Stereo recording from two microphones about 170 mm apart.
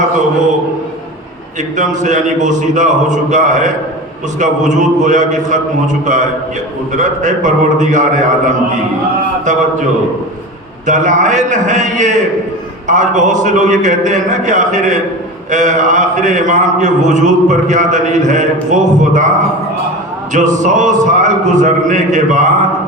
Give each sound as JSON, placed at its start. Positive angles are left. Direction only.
{"t": 1.7, "sound": "speech", "side_deg": -45}
{"t": 10.8, "sound": "speech", "side_deg": -45}
{"t": 20.3, "sound": "speech", "side_deg": -45}